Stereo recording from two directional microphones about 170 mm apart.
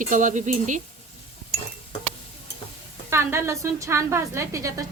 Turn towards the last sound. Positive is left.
turn(degrees=-20)  # may be behind; listen again after turning